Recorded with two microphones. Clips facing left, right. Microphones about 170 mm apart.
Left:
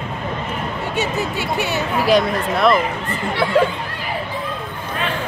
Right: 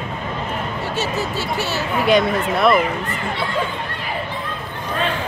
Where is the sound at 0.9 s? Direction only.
15° left (ahead or behind).